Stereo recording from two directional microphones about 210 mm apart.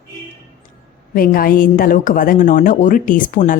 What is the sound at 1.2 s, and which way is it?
A woman's voice, 45° left (ahead or behind).